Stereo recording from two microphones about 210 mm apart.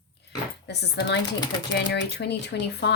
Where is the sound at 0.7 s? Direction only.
55° left (ahead or behind).